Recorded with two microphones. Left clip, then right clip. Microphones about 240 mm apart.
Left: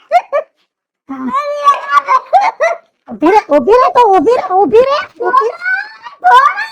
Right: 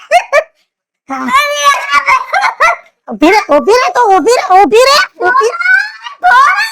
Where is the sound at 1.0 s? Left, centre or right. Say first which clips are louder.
Right 6 dB; right.